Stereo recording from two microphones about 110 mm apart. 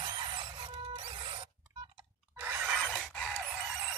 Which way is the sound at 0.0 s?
50° right (ahead or behind).